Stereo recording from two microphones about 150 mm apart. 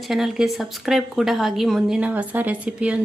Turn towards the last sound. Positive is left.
turn(degrees=-10)  # may be behind; listen again after turning